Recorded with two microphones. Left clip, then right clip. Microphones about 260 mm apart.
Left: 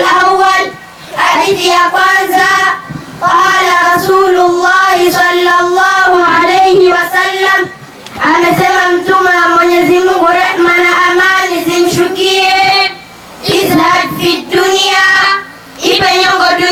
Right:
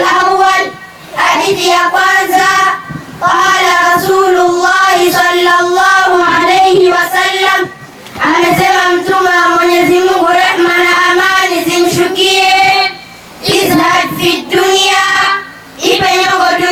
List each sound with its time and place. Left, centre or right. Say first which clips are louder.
0.0 s child singing: left 1 dB; centre
0.4 s a sound: even; centre
1.1 s child singing: left 1 dB; centre
3.9 s music: left 1 dB; centre
4.7 s child singing: even; centre
8.2 s child singing: left 1 dB; centre
8.4 s child singing: even; centre
8.9 s a sound: left 1 dB; centre
9.6 s music: even; centre
10.3 s a sound: right 1 dB; centre
10.8 s child singing: even; centre
15.8 s a sound: left 1 dB; centre